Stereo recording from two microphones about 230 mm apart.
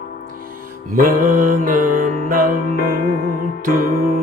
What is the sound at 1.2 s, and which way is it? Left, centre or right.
Mantra, right.